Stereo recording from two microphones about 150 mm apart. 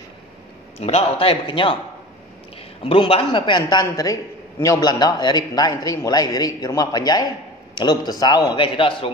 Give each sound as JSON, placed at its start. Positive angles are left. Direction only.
{"t": 0.7, "sound": "a man's voice", "side_deg": 45}
{"t": 2.8, "sound": "a man's voice", "side_deg": 40}